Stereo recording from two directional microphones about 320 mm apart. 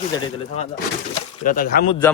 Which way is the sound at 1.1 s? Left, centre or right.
Left.